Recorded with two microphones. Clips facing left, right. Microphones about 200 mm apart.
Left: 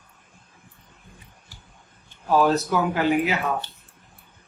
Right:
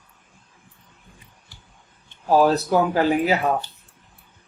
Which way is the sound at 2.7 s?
35° right (ahead or behind).